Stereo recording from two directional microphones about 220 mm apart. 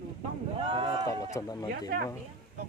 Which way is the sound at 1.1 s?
15° left (ahead or behind).